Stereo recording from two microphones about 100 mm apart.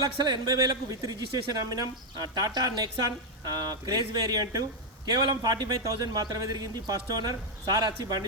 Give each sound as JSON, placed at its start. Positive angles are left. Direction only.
{"t": 0.0, "sound": "a man's voice", "side_deg": -45}